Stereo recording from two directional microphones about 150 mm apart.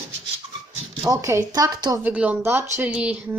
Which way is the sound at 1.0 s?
20° right (ahead or behind).